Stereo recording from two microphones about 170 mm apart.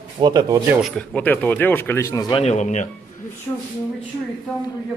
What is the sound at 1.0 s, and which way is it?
Speech, 10° left (ahead or behind).